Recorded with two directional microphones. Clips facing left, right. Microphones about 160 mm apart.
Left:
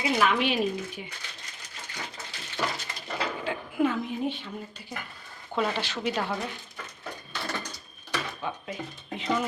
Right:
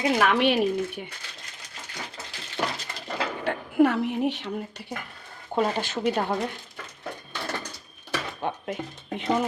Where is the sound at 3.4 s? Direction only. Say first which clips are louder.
Right 7 dB; 70° right (ahead or behind).